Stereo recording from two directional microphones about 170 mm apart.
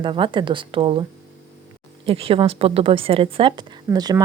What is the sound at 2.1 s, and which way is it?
Speech, 35° right (ahead or behind).